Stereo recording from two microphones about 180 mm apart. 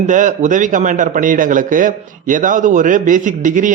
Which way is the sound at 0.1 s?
45° right (ahead or behind).